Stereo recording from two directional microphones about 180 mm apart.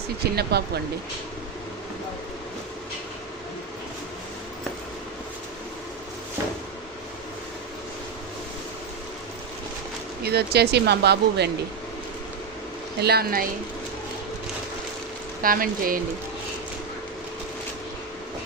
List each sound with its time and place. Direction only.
0.3 s speech: 65° right (ahead or behind)
10.2 s speech: 65° right (ahead or behind)
13.0 s speech: 60° right (ahead or behind)
15.4 s speech: 50° right (ahead or behind)